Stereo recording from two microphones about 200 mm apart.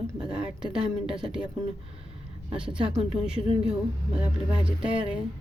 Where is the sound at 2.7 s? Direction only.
25° right (ahead or behind).